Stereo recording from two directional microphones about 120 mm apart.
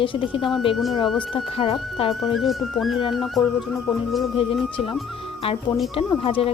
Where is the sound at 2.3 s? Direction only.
Centre (ahead or behind).